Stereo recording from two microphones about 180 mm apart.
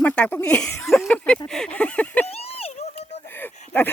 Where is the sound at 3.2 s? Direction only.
10° left (ahead or behind).